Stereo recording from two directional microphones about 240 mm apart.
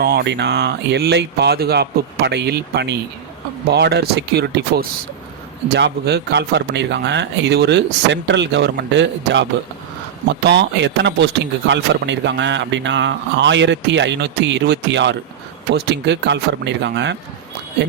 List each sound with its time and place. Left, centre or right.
0.0 s speech: right